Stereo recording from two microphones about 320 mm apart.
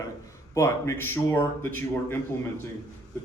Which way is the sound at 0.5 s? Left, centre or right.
Centre.